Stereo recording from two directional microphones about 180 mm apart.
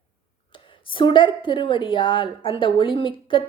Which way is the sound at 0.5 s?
30° left (ahead or behind).